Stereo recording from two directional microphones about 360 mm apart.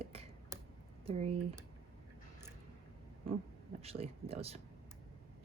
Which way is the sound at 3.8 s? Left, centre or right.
Centre.